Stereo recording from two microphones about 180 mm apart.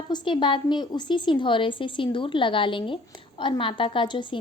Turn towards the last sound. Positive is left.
turn(degrees=25)  # may be behind; listen again after turning